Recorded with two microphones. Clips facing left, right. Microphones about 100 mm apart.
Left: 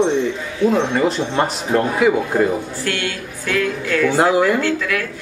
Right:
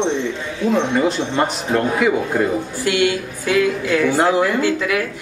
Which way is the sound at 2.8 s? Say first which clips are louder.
Right 6 dB; 15° right (ahead or behind).